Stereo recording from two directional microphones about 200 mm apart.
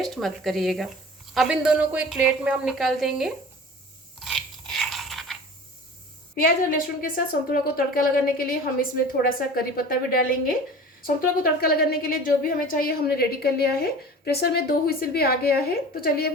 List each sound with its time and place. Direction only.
0.0 s a woman's voice: centre (ahead or behind)
4.2 s a sound: centre (ahead or behind)
6.4 s a woman's voice: 45° left (ahead or behind)